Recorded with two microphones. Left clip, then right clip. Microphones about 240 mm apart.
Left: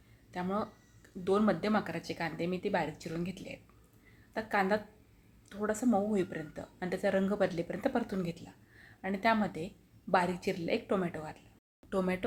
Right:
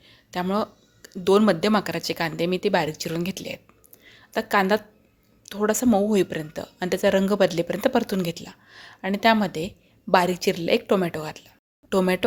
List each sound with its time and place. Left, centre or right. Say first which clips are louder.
0.3 s speech: right 10 dB; right